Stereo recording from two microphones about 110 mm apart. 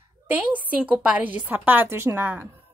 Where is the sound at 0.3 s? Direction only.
15° right (ahead or behind).